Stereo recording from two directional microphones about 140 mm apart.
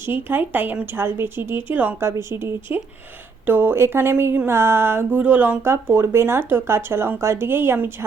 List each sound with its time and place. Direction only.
0.0 s speech: 15° right (ahead or behind)